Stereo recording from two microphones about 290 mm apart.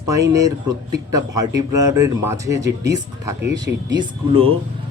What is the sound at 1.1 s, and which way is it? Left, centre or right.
Speech, centre.